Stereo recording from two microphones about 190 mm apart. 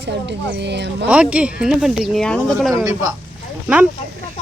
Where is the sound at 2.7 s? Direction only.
20° right (ahead or behind).